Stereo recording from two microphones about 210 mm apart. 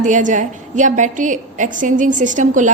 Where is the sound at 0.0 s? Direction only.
35° right (ahead or behind).